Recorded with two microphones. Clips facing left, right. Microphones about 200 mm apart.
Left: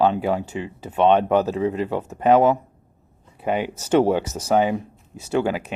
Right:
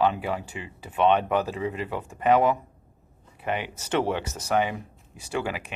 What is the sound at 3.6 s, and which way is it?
Speech, 45° left (ahead or behind).